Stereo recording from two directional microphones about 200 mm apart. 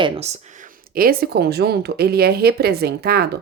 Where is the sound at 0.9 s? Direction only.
50° right (ahead or behind).